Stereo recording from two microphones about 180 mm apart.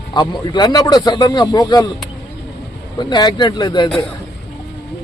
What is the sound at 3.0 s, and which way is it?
Speech, 25° left (ahead or behind).